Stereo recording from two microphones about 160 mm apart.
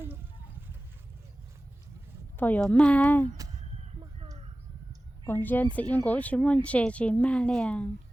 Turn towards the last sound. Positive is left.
turn(degrees=5)  # may be behind; listen again after turning